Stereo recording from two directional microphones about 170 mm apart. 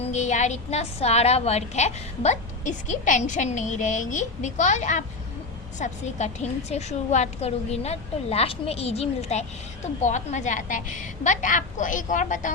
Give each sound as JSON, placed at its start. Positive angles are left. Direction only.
{"t": 0.0, "sound": "a woman's voice", "side_deg": 45}